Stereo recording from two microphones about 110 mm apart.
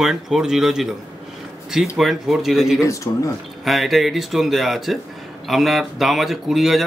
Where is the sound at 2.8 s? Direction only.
30° left (ahead or behind).